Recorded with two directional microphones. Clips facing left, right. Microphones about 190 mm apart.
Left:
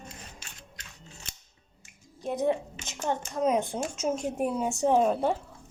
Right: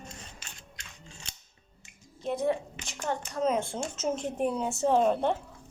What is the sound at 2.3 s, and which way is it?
Speech, 20° left (ahead or behind).